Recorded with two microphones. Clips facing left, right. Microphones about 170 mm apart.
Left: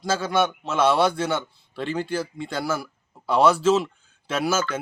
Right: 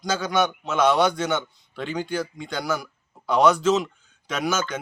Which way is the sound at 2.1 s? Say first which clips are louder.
Even; 30° left (ahead or behind).